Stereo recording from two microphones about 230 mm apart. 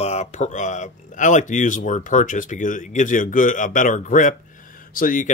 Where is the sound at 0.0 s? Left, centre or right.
Left.